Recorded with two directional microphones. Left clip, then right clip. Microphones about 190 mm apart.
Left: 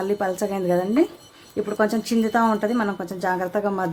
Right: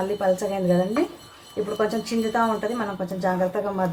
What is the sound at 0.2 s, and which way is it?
Speech, 55° left (ahead or behind).